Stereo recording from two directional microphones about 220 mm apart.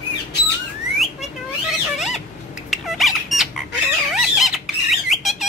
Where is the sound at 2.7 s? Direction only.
Centre (ahead or behind).